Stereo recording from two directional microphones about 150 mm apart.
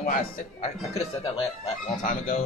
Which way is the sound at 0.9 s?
40° left (ahead or behind).